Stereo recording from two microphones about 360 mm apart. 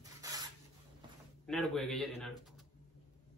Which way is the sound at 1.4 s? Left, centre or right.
Centre.